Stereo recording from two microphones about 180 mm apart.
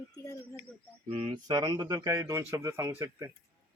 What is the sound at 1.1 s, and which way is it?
Speech, 25° right (ahead or behind).